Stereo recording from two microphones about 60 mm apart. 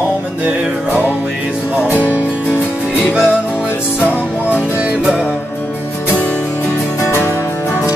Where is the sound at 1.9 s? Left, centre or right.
Right.